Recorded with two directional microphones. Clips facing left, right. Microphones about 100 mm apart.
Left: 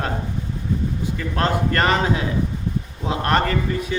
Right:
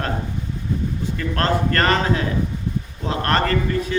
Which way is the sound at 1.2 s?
10° left (ahead or behind).